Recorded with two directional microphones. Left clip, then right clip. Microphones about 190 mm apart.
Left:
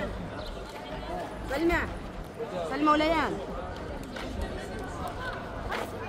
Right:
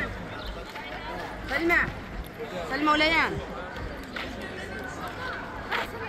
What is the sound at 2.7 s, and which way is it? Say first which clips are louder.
Speech: right 2 dB; 60° left (ahead or behind).